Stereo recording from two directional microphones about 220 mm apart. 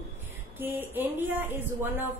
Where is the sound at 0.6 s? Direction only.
10° right (ahead or behind).